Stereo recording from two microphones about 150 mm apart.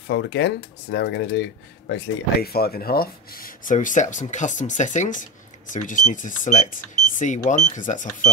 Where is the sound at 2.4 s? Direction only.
90° left.